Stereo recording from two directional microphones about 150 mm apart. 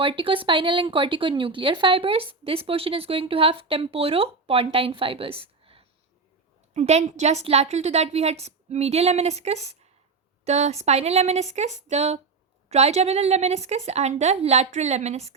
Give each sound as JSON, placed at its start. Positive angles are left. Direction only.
{"t": 0.0, "sound": "a woman's voice", "side_deg": -35}
{"t": 6.7, "sound": "a woman's voice", "side_deg": -50}